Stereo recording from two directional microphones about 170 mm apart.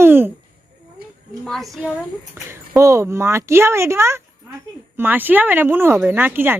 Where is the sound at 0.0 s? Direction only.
10° right (ahead or behind).